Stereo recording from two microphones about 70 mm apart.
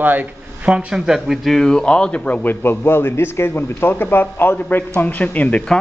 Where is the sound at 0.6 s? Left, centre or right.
Centre; by 5.6 s left.